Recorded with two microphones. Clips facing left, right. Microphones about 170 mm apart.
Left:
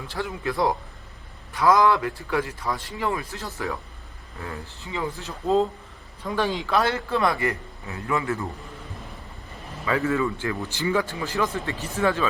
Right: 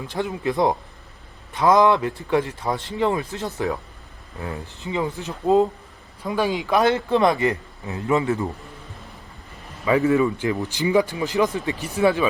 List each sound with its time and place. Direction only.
0.1 s a man's voice: 20° right (ahead or behind)
9.8 s speech: 15° right (ahead or behind)